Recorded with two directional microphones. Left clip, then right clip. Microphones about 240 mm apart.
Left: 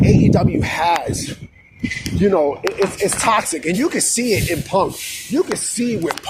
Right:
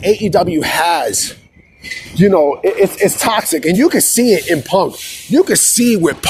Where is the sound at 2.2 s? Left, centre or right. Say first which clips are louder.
Right 5 dB; right.